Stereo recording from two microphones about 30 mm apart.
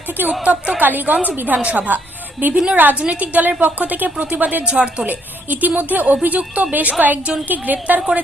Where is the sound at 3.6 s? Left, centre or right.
Right.